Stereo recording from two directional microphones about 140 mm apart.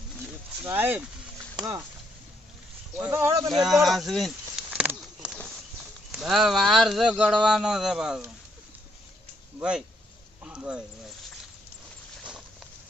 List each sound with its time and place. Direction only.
0.6 s speech: 15° right (ahead or behind)
3.1 s speech: 20° right (ahead or behind)
3.5 s speech: centre (ahead or behind)
3.8 s a sound: centre (ahead or behind)
6.1 s speech: centre (ahead or behind)
9.6 s speech: 5° right (ahead or behind)
10.4 s a sound: 5° right (ahead or behind)